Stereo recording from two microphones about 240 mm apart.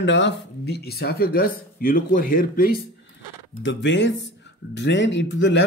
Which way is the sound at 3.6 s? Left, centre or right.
Left.